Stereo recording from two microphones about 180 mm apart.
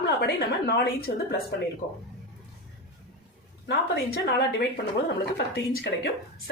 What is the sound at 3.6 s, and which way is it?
Speech, 65° left (ahead or behind).